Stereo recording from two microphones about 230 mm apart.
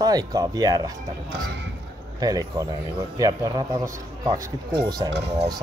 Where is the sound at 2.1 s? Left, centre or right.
Centre.